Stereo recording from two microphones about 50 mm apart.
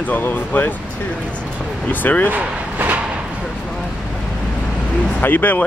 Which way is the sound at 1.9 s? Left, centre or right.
Left.